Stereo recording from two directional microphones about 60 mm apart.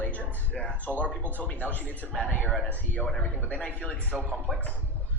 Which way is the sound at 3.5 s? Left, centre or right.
Centre.